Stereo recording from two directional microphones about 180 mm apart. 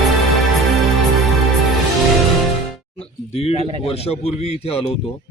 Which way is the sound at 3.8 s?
35° left (ahead or behind).